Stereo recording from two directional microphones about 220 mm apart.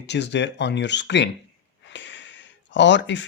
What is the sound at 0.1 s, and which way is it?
Speech, 50° left (ahead or behind).